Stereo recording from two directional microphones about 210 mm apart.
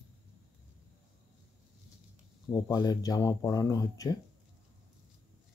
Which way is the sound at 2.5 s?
20° left (ahead or behind).